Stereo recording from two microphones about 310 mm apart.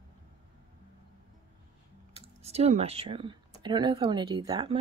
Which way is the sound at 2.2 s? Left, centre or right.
Centre.